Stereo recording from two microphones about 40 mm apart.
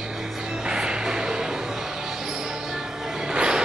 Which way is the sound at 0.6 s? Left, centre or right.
Right.